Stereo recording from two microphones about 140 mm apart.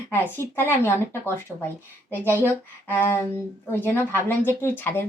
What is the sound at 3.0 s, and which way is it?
A woman's voice, 15° left (ahead or behind).